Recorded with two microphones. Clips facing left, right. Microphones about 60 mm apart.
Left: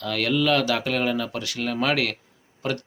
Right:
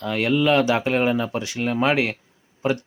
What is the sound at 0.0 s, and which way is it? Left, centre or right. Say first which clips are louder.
Speech: right 3 dB; right.